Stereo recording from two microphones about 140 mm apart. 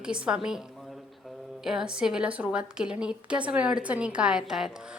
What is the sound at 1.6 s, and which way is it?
A woman's voice, 5° right (ahead or behind).